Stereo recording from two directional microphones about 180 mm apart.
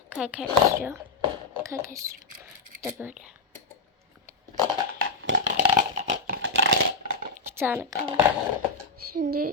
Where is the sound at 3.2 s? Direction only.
5° right (ahead or behind).